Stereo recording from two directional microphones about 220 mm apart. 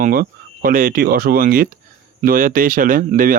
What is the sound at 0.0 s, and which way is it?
Speech, 40° right (ahead or behind).